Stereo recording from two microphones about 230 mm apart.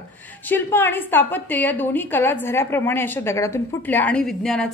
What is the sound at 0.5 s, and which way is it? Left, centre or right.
A woman's voice, centre.